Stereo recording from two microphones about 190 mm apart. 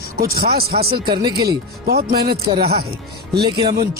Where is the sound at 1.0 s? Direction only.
25° right (ahead or behind).